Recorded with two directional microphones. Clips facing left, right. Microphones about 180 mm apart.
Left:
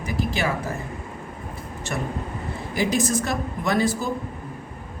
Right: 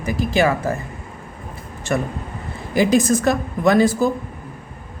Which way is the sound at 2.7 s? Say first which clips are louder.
Right 7 dB; 90° right.